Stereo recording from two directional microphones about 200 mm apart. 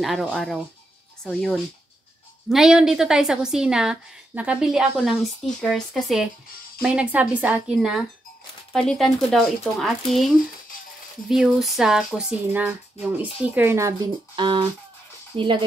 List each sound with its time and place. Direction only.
0.0 s a woman's voice: centre (ahead or behind); by 15.6 s 25° right (ahead or behind)